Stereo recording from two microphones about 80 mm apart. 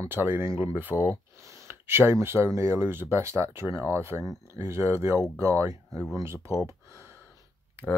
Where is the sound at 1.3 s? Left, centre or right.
Right.